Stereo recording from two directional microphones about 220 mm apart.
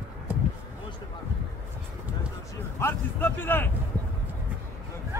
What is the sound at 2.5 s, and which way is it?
Speech, 10° left (ahead or behind).